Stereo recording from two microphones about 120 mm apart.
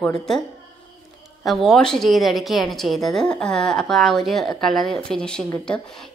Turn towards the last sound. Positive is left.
turn(degrees=5)  # may be behind; listen again after turning